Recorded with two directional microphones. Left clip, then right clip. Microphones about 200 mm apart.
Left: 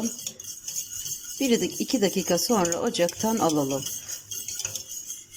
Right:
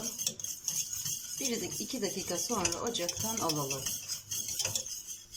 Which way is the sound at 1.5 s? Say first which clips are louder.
Left 13 dB; 45° left (ahead or behind).